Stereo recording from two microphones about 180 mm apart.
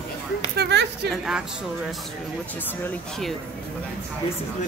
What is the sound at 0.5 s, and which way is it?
Speech, 70° right (ahead or behind).